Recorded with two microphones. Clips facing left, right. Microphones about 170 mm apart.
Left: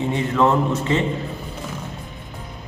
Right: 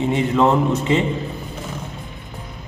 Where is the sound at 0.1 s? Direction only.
20° right (ahead or behind).